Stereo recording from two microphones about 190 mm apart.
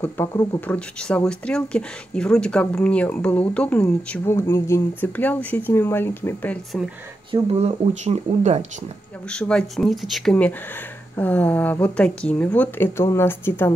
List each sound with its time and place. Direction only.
0.0 s speech: 10° left (ahead or behind)
7.2 s speech: 30° right (ahead or behind)
9.3 s speech: 5° left (ahead or behind)